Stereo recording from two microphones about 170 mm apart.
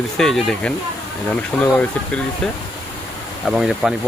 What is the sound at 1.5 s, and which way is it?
Speech, 15° left (ahead or behind).